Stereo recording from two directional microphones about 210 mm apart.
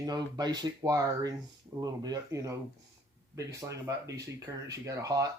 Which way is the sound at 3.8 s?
15° right (ahead or behind).